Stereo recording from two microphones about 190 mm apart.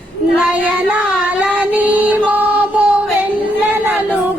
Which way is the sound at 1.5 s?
5° right (ahead or behind).